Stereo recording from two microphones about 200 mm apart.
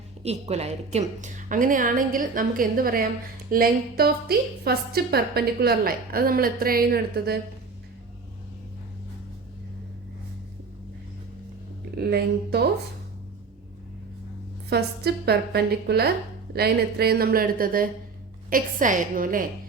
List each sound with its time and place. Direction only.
0.2 s a woman's voice: 30° right (ahead or behind); by 7.3 s 50° right (ahead or behind)
11.9 s a woman's voice: 55° right (ahead or behind)
14.7 s a woman's voice: 55° right (ahead or behind)